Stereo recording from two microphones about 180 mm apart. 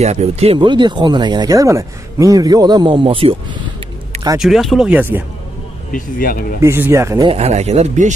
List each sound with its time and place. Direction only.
0.0 s speech: 35° right (ahead or behind)
4.4 s speech: centre (ahead or behind)
5.9 s speech: 50° left (ahead or behind)
6.6 s speech: 15° right (ahead or behind)
7.2 s speech: 35° right (ahead or behind)